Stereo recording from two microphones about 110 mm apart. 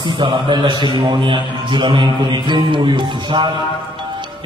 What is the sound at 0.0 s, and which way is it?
A man's voice, 45° right (ahead or behind).